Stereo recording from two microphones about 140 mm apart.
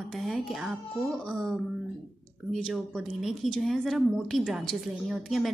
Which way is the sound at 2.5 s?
5° left (ahead or behind).